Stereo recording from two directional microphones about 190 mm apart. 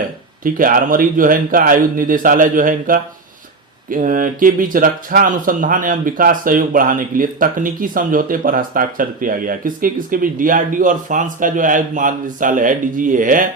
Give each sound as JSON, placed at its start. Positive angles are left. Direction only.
{"t": 0.4, "sound": "speech", "side_deg": -45}